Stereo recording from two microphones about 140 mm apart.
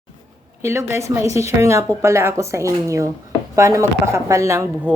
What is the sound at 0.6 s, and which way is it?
A woman's voice, 20° right (ahead or behind).